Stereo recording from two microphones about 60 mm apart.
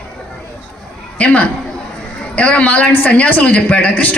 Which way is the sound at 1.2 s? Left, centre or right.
Left.